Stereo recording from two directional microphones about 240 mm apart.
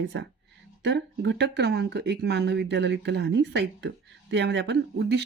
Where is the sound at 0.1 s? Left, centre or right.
Right.